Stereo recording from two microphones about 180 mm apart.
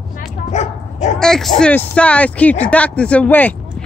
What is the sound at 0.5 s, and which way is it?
Bow-wow, 40° left (ahead or behind).